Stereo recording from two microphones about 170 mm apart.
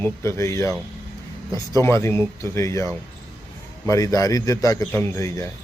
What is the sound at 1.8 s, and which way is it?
A man's voice, 15° left (ahead or behind).